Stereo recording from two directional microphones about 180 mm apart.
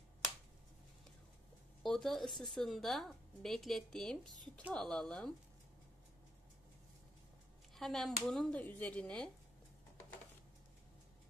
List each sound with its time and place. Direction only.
1.8 s a woman's voice: centre (ahead or behind)
7.7 s a woman's voice: centre (ahead or behind)